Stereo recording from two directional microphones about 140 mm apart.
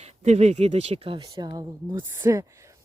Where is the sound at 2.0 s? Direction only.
15° right (ahead or behind).